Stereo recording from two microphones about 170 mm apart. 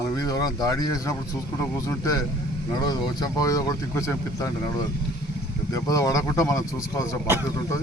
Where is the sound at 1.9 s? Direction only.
20° left (ahead or behind).